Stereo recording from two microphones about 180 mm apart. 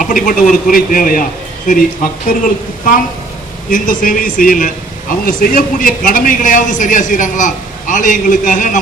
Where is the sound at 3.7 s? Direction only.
50° left (ahead or behind).